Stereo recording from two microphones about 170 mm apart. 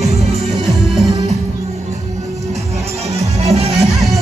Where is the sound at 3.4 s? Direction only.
40° right (ahead or behind).